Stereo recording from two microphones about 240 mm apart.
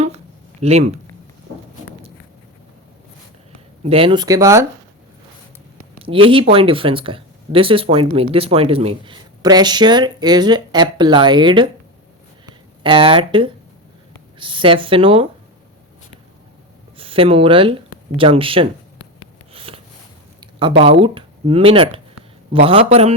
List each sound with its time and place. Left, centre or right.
0.6 s speech: right
3.8 s speech: right
6.0 s a sound: right
6.3 s speech: right
17.0 s speech: right
19.5 s a sound: right
20.6 s speech: right